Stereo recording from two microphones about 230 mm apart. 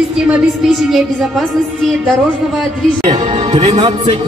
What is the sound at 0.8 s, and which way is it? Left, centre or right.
Speech, centre.